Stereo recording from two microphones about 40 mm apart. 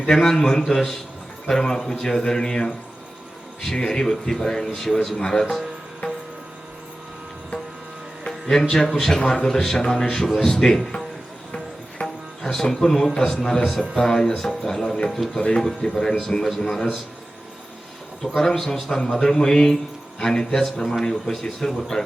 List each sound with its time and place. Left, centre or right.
0.1 s speech: centre
3.8 s speech: centre
8.3 s music: centre
8.7 s speech: centre
12.0 s music: centre
13.1 s speech: centre
15.4 s speech: left
18.3 s speech: centre